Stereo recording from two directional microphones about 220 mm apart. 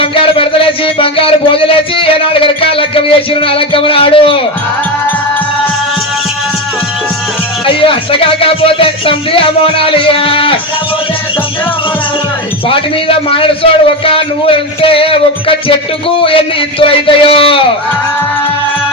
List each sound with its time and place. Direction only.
0.0 s music: 25° left (ahead or behind)
7.7 s speech: 25° left (ahead or behind)
12.6 s speech: 25° left (ahead or behind)